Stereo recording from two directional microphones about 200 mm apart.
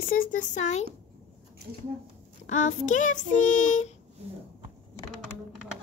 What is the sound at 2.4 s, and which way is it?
Child singing, 40° left (ahead or behind).